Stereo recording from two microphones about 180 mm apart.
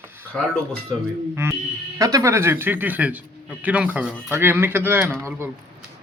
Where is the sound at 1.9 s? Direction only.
20° right (ahead or behind).